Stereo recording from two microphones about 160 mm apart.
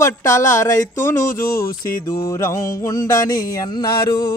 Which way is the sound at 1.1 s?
55° left (ahead or behind).